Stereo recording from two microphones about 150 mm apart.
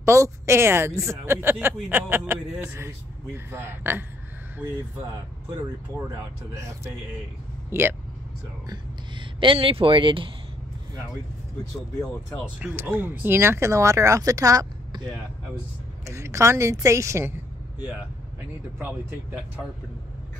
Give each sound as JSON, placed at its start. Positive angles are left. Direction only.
{"t": 0.0, "sound": "a woman's voice", "side_deg": -20}
{"t": 6.5, "sound": "a woman's voice", "side_deg": -20}
{"t": 8.6, "sound": "speech", "side_deg": -35}
{"t": 12.5, "sound": "speech", "side_deg": -10}
{"t": 16.1, "sound": "speech", "side_deg": -20}
{"t": 18.8, "sound": "a woman's voice", "side_deg": -15}